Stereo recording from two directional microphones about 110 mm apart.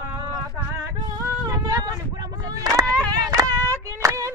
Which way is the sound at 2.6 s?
30° right (ahead or behind).